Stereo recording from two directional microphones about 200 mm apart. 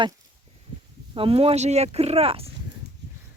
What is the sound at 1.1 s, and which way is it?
Speech, 25° right (ahead or behind).